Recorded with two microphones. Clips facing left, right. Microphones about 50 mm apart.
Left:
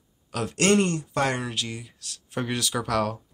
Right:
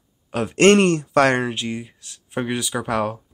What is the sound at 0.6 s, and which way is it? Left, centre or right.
Speech, right.